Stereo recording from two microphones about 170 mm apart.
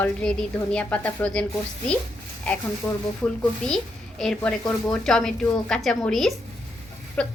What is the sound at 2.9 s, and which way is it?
A woman's voice, 10° left (ahead or behind).